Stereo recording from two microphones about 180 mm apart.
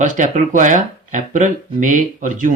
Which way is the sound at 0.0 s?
45° right (ahead or behind).